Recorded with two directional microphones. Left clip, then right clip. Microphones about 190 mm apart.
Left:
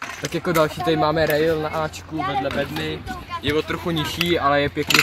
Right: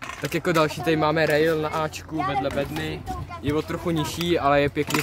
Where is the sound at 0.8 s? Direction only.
5° right (ahead or behind).